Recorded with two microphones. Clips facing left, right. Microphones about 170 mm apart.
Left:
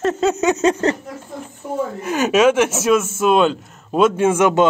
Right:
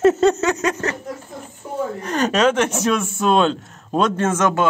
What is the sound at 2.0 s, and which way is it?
Speech, 5° left (ahead or behind).